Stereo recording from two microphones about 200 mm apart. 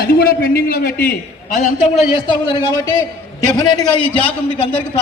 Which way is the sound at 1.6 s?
30° left (ahead or behind).